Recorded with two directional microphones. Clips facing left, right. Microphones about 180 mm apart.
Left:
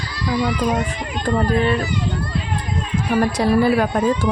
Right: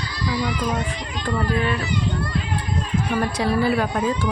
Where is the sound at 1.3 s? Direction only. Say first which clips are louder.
Left 5 dB; 45° left (ahead or behind).